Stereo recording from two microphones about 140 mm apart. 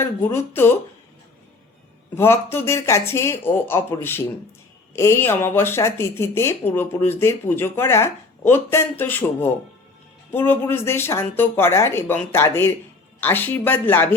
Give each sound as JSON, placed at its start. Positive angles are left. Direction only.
{"t": 0.0, "sound": "speech", "side_deg": 15}
{"t": 2.1, "sound": "speech", "side_deg": 15}